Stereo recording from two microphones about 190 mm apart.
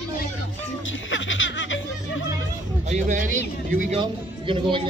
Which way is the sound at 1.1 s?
85° left.